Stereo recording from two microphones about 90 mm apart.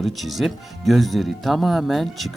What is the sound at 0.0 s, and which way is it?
Speech, centre (ahead or behind).